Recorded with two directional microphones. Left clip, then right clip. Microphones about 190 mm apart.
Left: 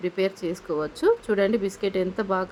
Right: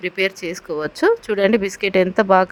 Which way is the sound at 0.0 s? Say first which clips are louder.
Right 5 dB; 35° right (ahead or behind).